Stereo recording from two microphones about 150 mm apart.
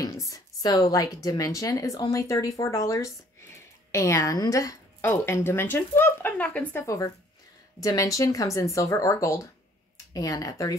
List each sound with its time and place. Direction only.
0.0 s a woman's voice: 20° left (ahead or behind)
7.8 s a woman's voice: 25° left (ahead or behind)